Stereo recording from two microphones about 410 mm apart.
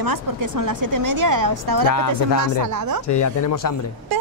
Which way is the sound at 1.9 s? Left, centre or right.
Left.